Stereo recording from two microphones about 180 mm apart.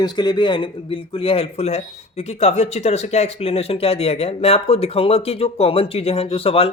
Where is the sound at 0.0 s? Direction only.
25° left (ahead or behind).